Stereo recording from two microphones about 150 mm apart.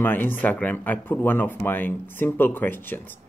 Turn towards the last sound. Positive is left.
turn(degrees=15)  # may be behind; listen again after turning